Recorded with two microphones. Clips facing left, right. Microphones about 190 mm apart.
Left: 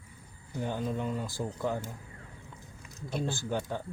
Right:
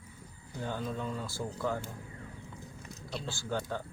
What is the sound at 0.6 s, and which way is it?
Speech, 15° left (ahead or behind).